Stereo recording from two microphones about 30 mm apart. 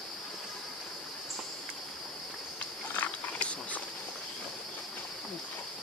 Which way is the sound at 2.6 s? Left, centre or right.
Left.